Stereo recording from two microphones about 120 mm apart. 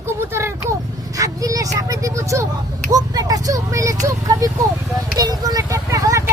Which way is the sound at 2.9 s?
30° right (ahead or behind).